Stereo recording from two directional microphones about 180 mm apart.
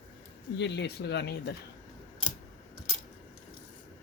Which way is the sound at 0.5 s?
75° left (ahead or behind).